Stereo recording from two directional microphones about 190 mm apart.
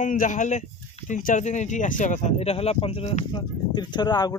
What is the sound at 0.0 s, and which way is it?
Speech, 45° left (ahead or behind).